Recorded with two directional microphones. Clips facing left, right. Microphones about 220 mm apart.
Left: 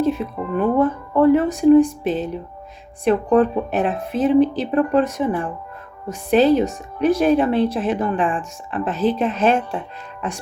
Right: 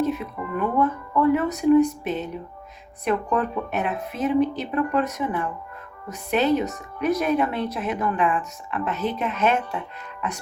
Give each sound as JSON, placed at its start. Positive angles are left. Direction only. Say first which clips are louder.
{"t": 0.0, "sound": "speech", "louder": "left 4 dB", "side_deg": 30}